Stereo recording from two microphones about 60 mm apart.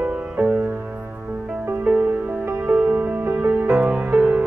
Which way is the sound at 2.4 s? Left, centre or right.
Right.